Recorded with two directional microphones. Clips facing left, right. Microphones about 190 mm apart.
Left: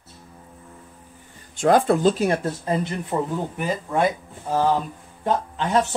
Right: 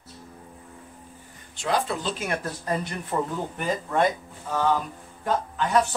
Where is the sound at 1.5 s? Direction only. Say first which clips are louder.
Left 9 dB; 50° left (ahead or behind).